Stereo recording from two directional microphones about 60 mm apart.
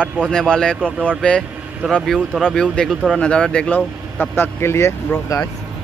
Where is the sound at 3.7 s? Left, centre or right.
Left.